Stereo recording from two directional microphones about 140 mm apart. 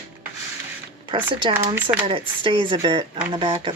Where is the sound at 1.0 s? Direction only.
35° right (ahead or behind).